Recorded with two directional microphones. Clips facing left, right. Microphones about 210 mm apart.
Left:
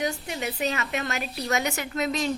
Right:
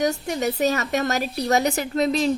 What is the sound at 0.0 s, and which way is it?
A woman's voice, 45° right (ahead or behind).